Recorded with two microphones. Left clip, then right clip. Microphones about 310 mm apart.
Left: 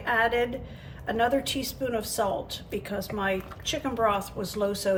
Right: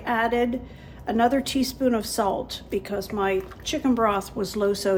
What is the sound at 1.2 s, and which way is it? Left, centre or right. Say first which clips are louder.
Speech: right 4 dB; centre.